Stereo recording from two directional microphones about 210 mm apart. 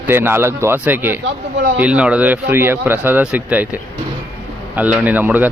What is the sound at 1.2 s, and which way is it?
Speech, 60° right (ahead or behind).